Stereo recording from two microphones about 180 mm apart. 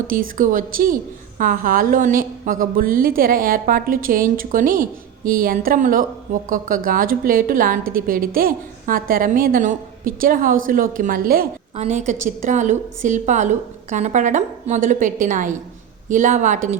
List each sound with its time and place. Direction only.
0.1 s a woman's voice: 50° right (ahead or behind)
11.8 s a woman's voice: 40° right (ahead or behind)